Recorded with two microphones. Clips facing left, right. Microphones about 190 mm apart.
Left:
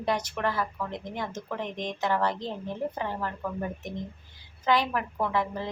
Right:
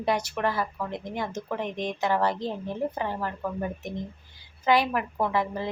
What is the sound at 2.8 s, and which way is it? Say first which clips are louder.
Speech: right 2 dB; 35° right (ahead or behind).